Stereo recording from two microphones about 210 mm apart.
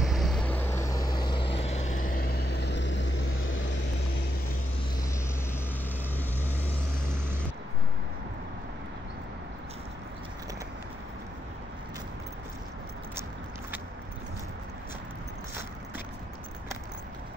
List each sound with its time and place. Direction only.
0.0 s vehicle: centre (ahead or behind); by 2.0 s 30° left (ahead or behind)
2.1 s vehicle: 45° left (ahead or behind); by 3.7 s 60° left (ahead or behind)